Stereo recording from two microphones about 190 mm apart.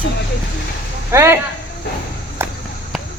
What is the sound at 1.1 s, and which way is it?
Speech, 15° right (ahead or behind).